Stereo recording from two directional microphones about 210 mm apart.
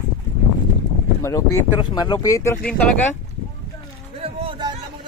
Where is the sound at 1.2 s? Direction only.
15° left (ahead or behind).